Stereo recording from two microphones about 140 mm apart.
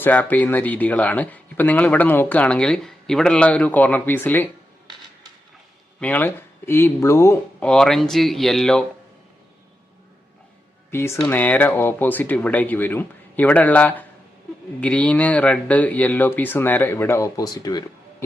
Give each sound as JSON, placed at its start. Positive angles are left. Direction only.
{"t": 0.0, "sound": "speech", "side_deg": 10}
{"t": 6.0, "sound": "speech", "side_deg": 10}
{"t": 7.6, "sound": "speech", "side_deg": 5}
{"t": 10.9, "sound": "speech", "side_deg": 15}